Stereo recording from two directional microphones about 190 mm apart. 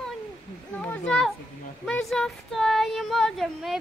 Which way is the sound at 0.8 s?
5° left (ahead or behind).